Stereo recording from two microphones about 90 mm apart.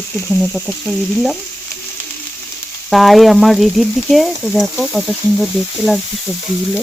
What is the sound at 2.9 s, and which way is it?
Speech, centre (ahead or behind).